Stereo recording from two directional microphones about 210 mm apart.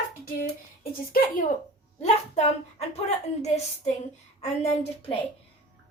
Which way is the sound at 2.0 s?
30° left (ahead or behind).